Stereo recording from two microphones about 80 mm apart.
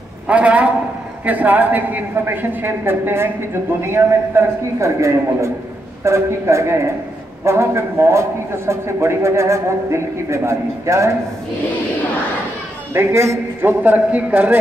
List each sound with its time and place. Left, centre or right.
0.3 s a man's voice: centre; by 11.1 s right
12.9 s a man's voice: right
13.6 s a man's voice: right